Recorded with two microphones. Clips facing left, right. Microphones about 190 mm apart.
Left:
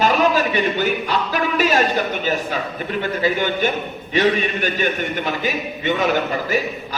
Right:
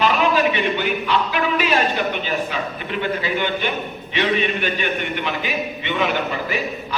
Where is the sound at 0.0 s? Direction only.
40° left (ahead or behind).